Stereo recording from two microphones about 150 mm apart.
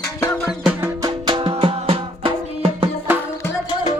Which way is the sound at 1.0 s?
35° right (ahead or behind).